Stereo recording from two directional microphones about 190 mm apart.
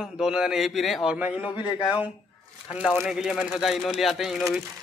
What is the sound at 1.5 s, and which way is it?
Speech, 25° left (ahead or behind).